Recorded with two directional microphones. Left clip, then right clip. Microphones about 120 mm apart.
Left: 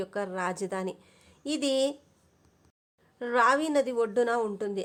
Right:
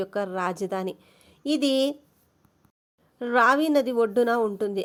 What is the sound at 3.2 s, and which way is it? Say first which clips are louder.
Speech: right 4 dB; 40° right (ahead or behind).